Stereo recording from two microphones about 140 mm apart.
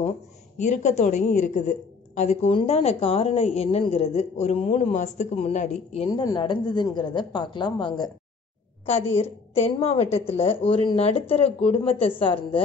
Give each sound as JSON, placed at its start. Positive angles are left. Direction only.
{"t": 0.6, "sound": "a woman's voice", "side_deg": 55}
{"t": 6.0, "sound": "a woman's voice", "side_deg": 30}
{"t": 9.1, "sound": "a woman's voice", "side_deg": 45}